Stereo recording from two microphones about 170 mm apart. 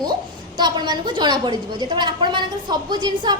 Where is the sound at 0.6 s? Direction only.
25° right (ahead or behind).